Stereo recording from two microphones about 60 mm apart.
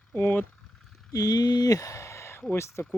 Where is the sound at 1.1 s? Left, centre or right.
Left.